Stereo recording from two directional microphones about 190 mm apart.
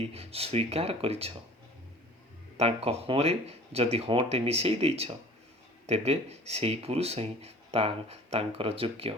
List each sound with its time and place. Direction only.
0.1 s speech: 30° right (ahead or behind)
2.6 s speech: 35° right (ahead or behind)